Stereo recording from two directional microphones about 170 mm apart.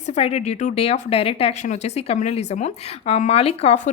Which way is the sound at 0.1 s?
40° left (ahead or behind).